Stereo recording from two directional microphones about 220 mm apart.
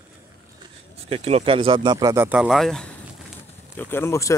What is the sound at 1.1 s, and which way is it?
Speech, 25° right (ahead or behind).